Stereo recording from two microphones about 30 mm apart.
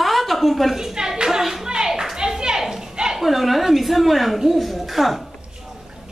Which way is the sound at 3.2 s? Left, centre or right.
Centre.